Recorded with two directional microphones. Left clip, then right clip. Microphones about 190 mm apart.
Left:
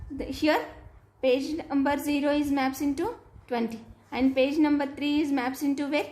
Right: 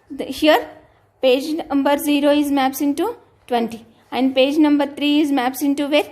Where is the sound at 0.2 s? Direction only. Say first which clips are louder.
Right 10 dB; 45° right (ahead or behind).